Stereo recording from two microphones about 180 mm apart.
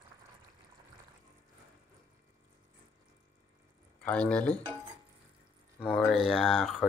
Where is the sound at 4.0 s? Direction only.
5° left (ahead or behind).